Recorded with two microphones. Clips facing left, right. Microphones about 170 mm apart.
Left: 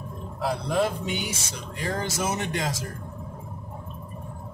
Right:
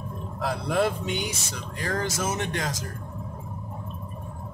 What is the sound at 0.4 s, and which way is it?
Speech, centre (ahead or behind).